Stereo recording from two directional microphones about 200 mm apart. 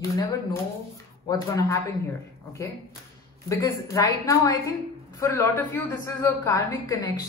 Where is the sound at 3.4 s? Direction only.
15° left (ahead or behind).